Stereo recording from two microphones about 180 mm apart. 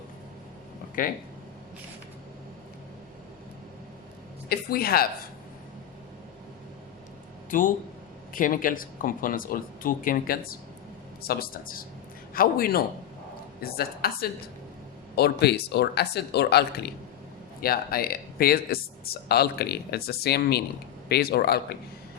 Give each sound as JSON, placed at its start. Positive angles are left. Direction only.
{"t": 1.0, "sound": "speech", "side_deg": 50}
{"t": 4.4, "sound": "speech", "side_deg": 60}
{"t": 7.5, "sound": "speech", "side_deg": 50}